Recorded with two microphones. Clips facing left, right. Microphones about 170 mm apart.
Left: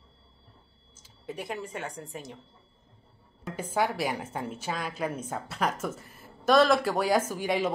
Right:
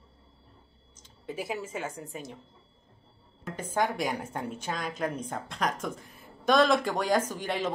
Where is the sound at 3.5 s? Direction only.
10° left (ahead or behind).